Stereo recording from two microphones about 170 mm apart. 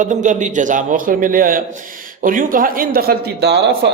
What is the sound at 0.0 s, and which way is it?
A man's voice, 45° right (ahead or behind).